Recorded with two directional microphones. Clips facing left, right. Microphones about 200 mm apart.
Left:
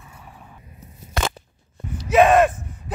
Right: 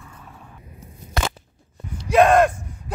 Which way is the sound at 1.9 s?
5° left (ahead or behind).